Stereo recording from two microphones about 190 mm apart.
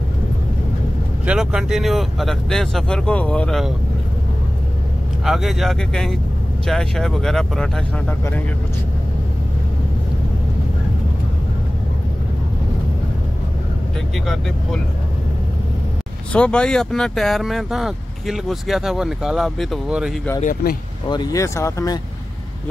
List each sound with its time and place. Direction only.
1.2 s speech: 5° right (ahead or behind)
5.2 s speech: centre (ahead or behind)
14.1 s speech: centre (ahead or behind)
16.3 s speech: 5° left (ahead or behind)
21.1 s speech: 20° left (ahead or behind)